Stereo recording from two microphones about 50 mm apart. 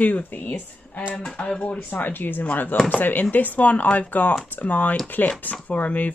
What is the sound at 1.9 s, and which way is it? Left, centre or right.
Speech, left.